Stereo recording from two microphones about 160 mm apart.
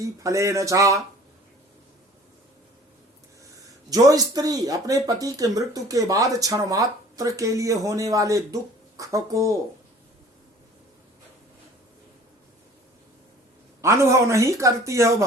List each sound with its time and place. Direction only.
0.0 s speech: 20° right (ahead or behind)
3.8 s speech: 20° right (ahead or behind)
13.8 s speech: 20° right (ahead or behind)